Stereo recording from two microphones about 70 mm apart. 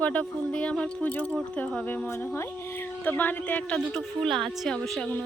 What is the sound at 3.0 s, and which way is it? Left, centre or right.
Speech, left.